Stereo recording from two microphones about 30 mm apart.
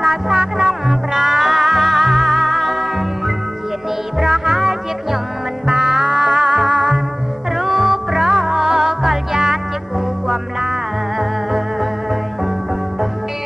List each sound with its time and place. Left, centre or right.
0.0 s music: centre
4.2 s music: centre